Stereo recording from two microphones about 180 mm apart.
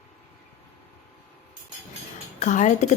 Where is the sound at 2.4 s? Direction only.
40° left (ahead or behind).